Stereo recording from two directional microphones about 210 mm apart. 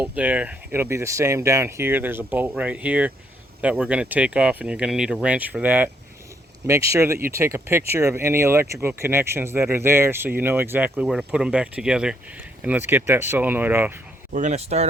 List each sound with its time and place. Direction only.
0.0 s speech: 5° right (ahead or behind)
14.3 s speech: 35° right (ahead or behind)